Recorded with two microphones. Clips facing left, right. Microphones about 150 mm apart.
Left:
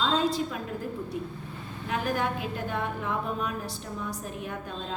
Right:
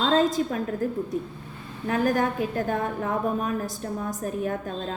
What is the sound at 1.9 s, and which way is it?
A woman's voice, 45° right (ahead or behind).